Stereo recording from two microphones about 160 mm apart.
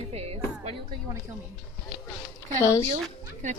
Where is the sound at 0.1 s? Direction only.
40° right (ahead or behind).